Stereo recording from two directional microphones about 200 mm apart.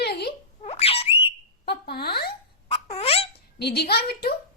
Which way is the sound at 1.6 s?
55° left (ahead or behind).